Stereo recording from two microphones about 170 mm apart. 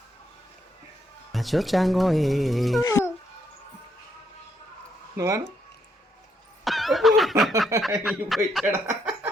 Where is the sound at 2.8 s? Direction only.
20° left (ahead or behind).